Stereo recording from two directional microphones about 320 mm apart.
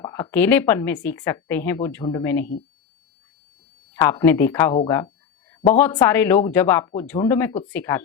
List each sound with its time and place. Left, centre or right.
0.0 s speech: centre
3.9 s speech: centre